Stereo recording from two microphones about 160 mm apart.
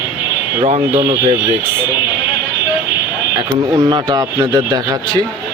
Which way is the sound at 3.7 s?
25° right (ahead or behind).